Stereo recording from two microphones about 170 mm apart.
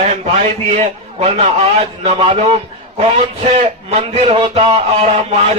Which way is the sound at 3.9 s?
40° right (ahead or behind).